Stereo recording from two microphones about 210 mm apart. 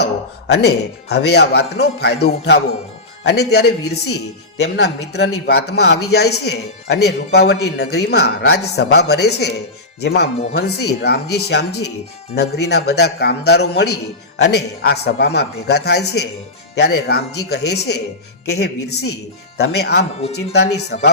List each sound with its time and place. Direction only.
0.0 s a man's voice: 50° left (ahead or behind)